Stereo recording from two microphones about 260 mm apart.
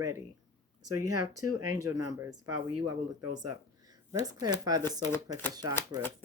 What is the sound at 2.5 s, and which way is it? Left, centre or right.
Speech, right.